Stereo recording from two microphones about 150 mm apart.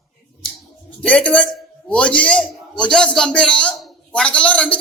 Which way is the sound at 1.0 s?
5° left (ahead or behind).